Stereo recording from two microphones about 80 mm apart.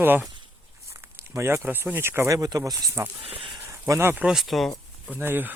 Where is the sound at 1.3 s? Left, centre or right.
Right.